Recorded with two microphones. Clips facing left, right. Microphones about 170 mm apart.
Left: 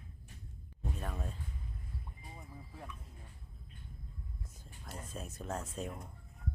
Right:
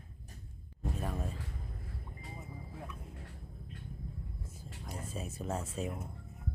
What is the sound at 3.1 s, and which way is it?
Vehicle, 85° right.